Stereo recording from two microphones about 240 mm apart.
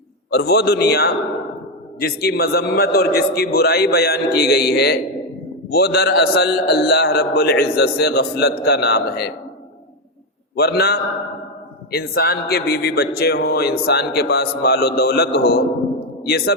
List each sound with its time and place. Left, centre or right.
0.3 s a man's voice: left
10.5 s a man's voice: left